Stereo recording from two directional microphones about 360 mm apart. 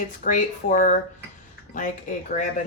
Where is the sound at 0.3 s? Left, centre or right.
Centre.